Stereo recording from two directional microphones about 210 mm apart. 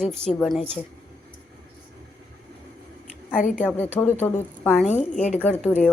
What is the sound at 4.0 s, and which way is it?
Speech, 10° left (ahead or behind).